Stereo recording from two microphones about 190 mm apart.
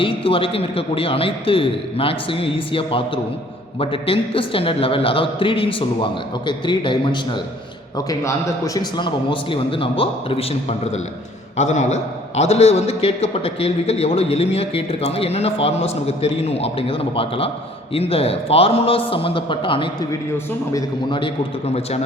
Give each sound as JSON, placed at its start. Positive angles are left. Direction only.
{"t": 0.0, "sound": "a man's voice", "side_deg": 30}